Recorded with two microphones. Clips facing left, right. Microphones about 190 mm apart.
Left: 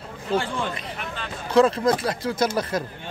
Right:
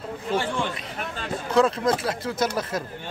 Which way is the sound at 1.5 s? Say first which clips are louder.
Left 3 dB; centre (ahead or behind).